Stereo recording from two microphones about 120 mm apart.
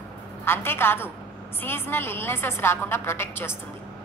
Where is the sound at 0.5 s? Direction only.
20° left (ahead or behind).